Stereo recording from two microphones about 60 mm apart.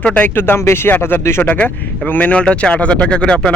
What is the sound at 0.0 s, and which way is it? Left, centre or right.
Speech, left.